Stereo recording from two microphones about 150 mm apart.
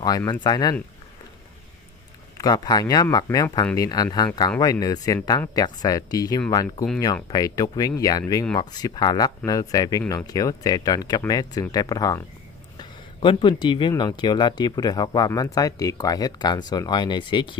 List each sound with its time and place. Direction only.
0.0 s speech: 25° left (ahead or behind)
2.3 s speech: 25° left (ahead or behind)